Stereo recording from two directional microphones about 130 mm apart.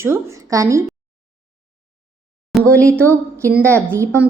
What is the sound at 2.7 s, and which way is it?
Speech, 10° left (ahead or behind).